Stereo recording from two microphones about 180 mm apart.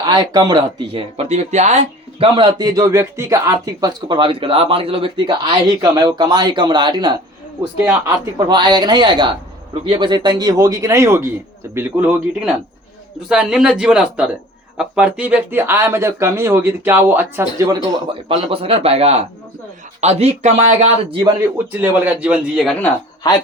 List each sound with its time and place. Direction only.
0.0 s speech: 25° right (ahead or behind)
18.1 s speech: 30° right (ahead or behind)
21.7 s speech: 10° right (ahead or behind)